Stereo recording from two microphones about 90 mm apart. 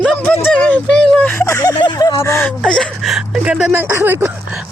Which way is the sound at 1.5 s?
45° left (ahead or behind).